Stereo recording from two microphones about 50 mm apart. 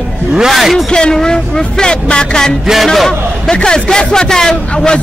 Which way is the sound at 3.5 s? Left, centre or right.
Centre.